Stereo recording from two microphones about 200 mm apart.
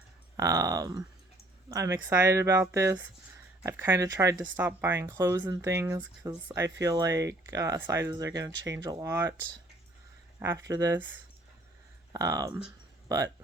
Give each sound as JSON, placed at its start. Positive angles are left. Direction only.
{"t": 0.3, "sound": "speech", "side_deg": -15}
{"t": 10.4, "sound": "speech", "side_deg": -15}
{"t": 12.1, "sound": "speech", "side_deg": -15}